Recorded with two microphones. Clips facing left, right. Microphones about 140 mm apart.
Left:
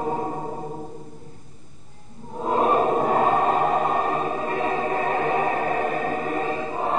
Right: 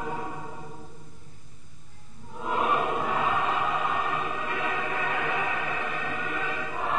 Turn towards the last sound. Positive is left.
turn(degrees=35)  # may be behind; listen again after turning